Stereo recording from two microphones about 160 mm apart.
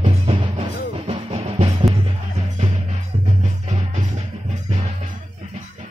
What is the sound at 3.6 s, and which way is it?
Music, 50° right (ahead or behind).